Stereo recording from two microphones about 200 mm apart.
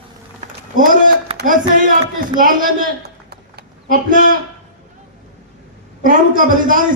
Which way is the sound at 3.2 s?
50° right (ahead or behind).